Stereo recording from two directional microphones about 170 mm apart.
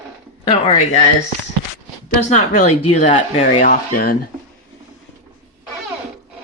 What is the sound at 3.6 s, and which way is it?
Speech, 60° left (ahead or behind).